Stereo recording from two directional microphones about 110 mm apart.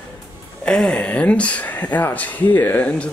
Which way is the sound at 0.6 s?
10° left (ahead or behind).